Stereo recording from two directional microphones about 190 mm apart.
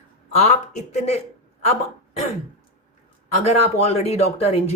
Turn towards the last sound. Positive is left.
turn(degrees=35)  # may be behind; listen again after turning